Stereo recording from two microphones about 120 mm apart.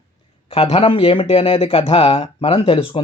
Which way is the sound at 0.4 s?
50° left (ahead or behind).